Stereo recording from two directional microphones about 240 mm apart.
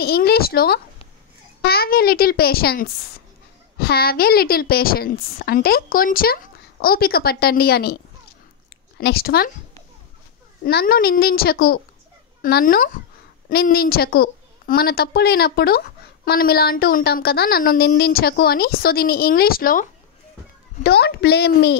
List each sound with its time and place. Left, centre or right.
0.0 s a woman's voice: left
10.6 s a woman's voice: left